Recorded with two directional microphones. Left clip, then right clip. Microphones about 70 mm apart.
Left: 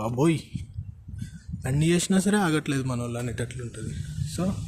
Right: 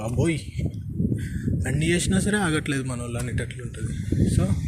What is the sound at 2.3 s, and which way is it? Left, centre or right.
Speech, left.